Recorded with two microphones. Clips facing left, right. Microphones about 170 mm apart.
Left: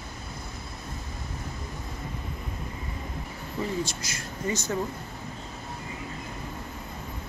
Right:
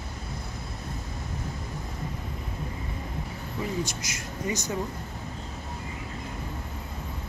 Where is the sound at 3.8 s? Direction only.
20° right (ahead or behind).